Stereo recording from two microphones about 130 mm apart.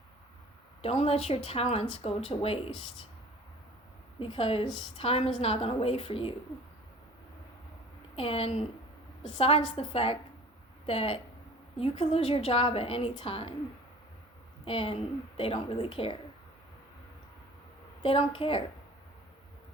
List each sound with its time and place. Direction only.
0.8 s a woman's voice: 50° left (ahead or behind)
4.2 s a woman's voice: 45° left (ahead or behind)
8.1 s a woman's voice: 50° left (ahead or behind)
14.6 s a woman's voice: 45° left (ahead or behind)
18.0 s a woman's voice: 45° left (ahead or behind)